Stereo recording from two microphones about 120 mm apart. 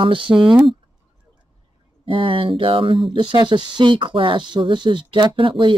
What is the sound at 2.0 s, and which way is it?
Speech, 45° right (ahead or behind).